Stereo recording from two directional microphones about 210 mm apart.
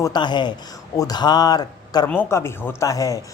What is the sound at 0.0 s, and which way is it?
A man's voice, 20° left (ahead or behind).